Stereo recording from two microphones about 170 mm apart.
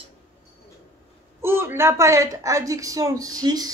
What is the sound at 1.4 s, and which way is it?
Speech, 15° right (ahead or behind).